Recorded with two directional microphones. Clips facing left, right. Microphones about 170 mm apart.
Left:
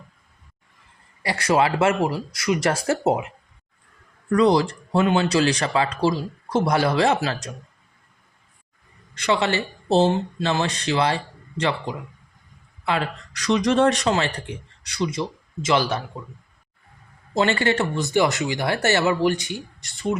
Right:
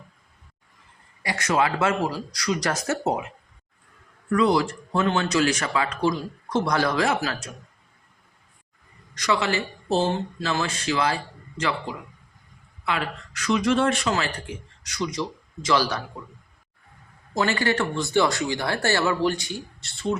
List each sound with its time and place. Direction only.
1.2 s speech: 35° left (ahead or behind)
4.3 s speech: 35° left (ahead or behind)
4.9 s speech: 15° left (ahead or behind)
5.2 s speech: 30° left (ahead or behind)
9.1 s speech: 30° left (ahead or behind)
12.8 s speech: 30° left (ahead or behind)
17.3 s speech: 25° left (ahead or behind)